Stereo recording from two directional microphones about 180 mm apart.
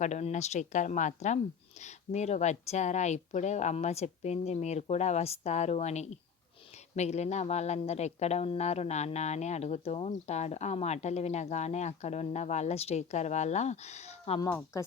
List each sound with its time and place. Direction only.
0.0 s speech: 40° left (ahead or behind)
14.4 s speech: 15° left (ahead or behind)